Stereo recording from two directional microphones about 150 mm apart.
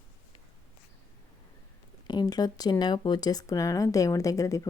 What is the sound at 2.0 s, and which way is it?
Speech, 25° left (ahead or behind).